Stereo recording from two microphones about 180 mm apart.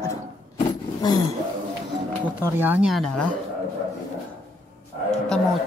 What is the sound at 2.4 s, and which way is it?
Speech, 10° right (ahead or behind).